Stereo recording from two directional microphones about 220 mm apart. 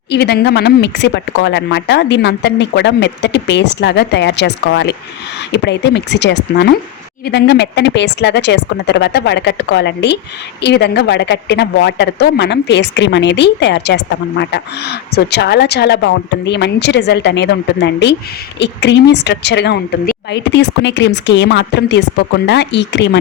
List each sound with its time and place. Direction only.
0.1 s a woman's voice: 50° left (ahead or behind)